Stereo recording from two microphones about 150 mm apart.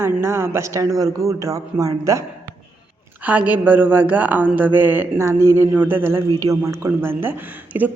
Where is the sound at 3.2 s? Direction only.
10° right (ahead or behind).